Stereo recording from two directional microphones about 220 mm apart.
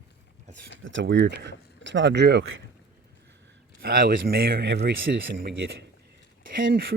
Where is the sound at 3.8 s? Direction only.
40° right (ahead or behind).